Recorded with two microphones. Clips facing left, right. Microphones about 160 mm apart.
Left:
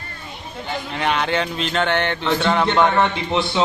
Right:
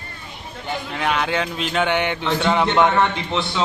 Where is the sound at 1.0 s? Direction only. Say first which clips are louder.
Left 1 dB; 5° right (ahead or behind).